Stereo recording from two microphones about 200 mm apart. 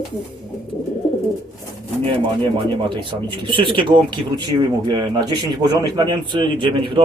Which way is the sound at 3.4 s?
25° right (ahead or behind).